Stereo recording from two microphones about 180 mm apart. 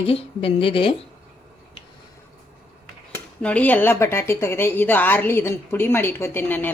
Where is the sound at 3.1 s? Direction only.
5° left (ahead or behind).